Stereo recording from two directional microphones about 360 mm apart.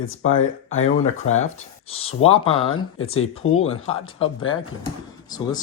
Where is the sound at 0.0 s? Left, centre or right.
Left.